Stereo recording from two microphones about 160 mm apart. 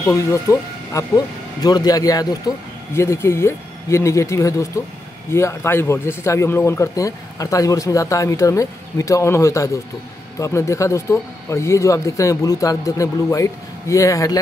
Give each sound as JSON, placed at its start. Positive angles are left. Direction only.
{"t": 0.0, "sound": "speech", "side_deg": 20}